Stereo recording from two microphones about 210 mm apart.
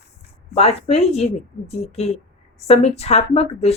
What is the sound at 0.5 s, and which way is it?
Speech, 30° left (ahead or behind).